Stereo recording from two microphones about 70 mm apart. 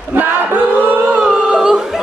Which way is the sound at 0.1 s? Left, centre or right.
Right.